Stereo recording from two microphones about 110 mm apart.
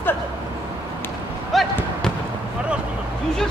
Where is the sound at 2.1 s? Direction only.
5° left (ahead or behind).